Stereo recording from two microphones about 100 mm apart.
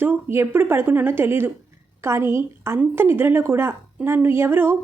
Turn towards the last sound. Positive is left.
turn(degrees=-25)  # may be behind; listen again after turning